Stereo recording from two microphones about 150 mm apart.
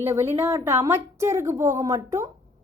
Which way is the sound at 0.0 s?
20° right (ahead or behind).